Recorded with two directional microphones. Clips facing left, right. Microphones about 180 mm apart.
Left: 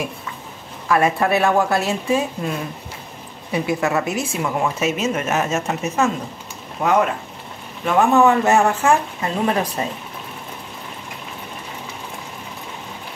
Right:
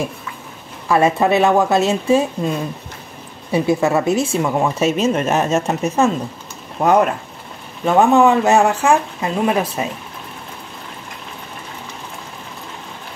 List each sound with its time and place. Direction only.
0.8 s a woman's voice: 25° right (ahead or behind)
3.5 s a woman's voice: 30° right (ahead or behind)
7.8 s speech: 20° right (ahead or behind)